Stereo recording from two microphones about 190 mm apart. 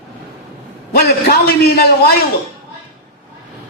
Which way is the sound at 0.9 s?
55° left (ahead or behind).